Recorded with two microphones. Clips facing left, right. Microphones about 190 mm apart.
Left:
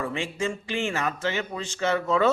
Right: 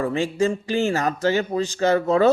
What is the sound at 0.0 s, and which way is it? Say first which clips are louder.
A man's voice: right 7 dB; 40° right (ahead or behind).